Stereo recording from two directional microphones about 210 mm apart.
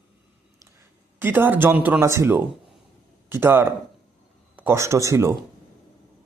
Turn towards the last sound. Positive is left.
turn(degrees=-15)  # may be behind; listen again after turning